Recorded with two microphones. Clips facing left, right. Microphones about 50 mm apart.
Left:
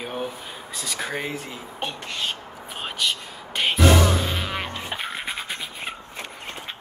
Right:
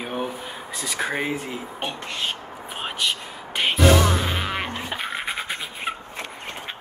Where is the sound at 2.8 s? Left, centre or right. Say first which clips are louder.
Even; centre.